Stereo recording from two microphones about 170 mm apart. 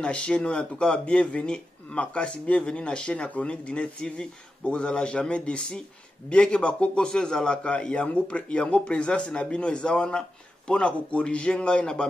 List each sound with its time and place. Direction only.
0.0 s speech: 5° left (ahead or behind)